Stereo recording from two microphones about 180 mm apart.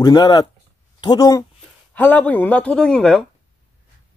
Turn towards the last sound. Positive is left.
turn(degrees=0)  # may be behind; listen again after turning